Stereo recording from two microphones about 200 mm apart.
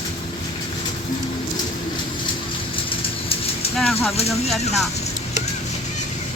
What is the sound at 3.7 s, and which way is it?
Vehicle, 5° left (ahead or behind).